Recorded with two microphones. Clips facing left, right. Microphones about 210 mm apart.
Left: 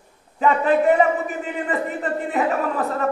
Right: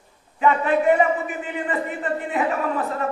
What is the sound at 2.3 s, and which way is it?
Speech, 40° left (ahead or behind).